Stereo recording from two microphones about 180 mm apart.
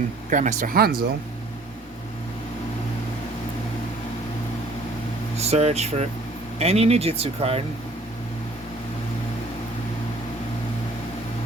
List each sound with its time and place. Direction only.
0.3 s speech: 45° right (ahead or behind)
5.4 s speech: 35° right (ahead or behind)